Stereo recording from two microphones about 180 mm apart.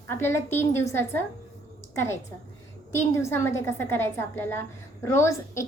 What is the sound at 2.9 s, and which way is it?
A woman's voice, 15° left (ahead or behind).